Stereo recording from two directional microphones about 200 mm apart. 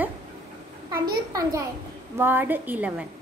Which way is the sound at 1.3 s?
15° right (ahead or behind).